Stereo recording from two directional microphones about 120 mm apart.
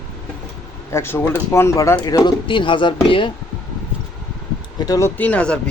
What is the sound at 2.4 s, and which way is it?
Speech, 45° left (ahead or behind).